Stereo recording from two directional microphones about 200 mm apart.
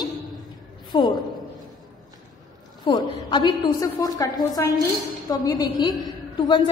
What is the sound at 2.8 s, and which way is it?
A woman's voice, 20° left (ahead or behind).